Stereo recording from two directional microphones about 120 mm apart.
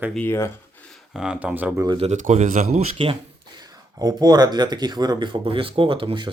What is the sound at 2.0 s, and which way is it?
Speech, 80° right.